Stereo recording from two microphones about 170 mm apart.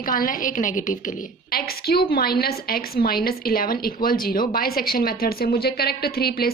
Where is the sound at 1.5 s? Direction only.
65° left (ahead or behind).